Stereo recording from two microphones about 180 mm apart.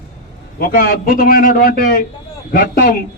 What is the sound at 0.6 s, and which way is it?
A man's voice, 55° left (ahead or behind).